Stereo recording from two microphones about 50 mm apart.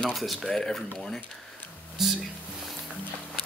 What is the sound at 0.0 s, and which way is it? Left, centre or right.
Speech, centre.